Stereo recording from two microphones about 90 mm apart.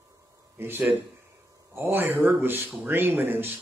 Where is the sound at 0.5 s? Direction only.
25° right (ahead or behind).